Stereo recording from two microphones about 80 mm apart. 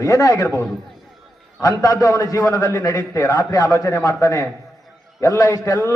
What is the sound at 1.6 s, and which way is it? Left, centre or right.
A man's voice, left.